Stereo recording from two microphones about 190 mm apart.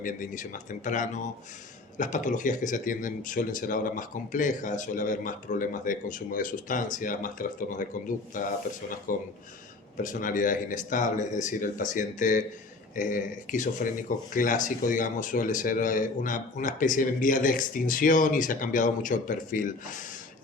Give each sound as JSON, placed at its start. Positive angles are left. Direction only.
{"t": 0.0, "sound": "speech", "side_deg": 45}